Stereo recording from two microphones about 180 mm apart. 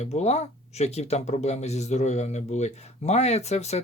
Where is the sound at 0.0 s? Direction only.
35° left (ahead or behind).